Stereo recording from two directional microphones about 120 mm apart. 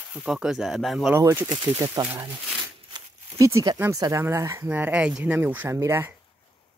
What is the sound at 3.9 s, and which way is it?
Speech, 25° right (ahead or behind).